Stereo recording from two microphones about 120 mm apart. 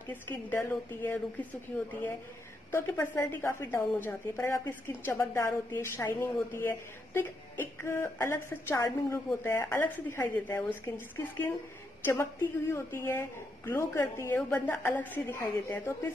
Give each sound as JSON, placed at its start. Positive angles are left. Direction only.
{"t": 0.1, "sound": "a woman's voice", "side_deg": 15}
{"t": 2.7, "sound": "a woman's voice", "side_deg": 15}
{"t": 12.0, "sound": "a woman's voice", "side_deg": 20}